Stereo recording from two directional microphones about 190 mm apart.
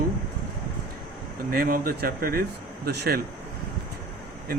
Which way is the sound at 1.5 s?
50° right (ahead or behind).